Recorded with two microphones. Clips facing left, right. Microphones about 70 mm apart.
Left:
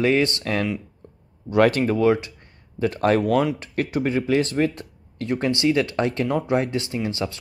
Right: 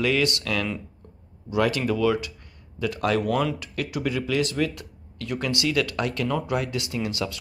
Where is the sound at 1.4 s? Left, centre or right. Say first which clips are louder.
Left 6 dB; left.